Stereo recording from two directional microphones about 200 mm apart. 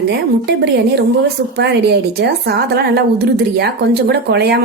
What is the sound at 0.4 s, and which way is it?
A woman's voice, 55° right (ahead or behind).